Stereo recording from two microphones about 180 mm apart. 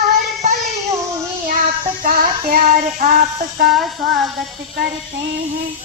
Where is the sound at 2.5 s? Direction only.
50° right (ahead or behind).